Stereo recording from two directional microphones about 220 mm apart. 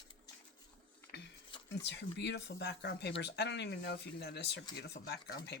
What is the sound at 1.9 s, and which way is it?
Speech, 50° left (ahead or behind).